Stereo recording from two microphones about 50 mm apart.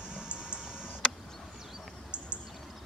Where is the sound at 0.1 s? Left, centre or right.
Centre.